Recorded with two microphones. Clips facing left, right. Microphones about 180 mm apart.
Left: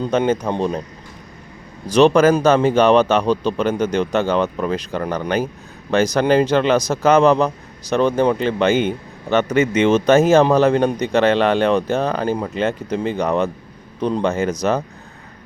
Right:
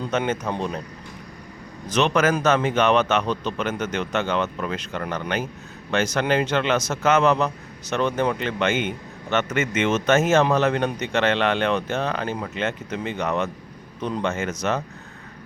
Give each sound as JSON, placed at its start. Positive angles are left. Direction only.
{"t": 0.0, "sound": "speech", "side_deg": 30}
{"t": 1.9, "sound": "speech", "side_deg": 35}